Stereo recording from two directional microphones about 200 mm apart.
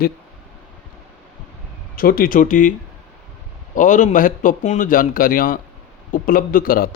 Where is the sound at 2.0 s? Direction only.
45° left (ahead or behind).